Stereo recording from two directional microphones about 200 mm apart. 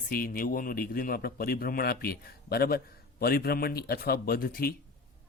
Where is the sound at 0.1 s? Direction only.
45° left (ahead or behind).